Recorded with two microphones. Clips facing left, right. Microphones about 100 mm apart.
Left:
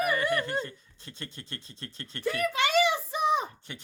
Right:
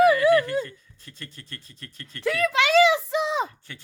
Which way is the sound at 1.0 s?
25° left (ahead or behind).